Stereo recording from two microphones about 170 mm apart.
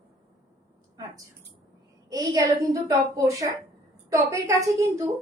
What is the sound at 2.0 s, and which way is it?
A woman's voice, 20° right (ahead or behind).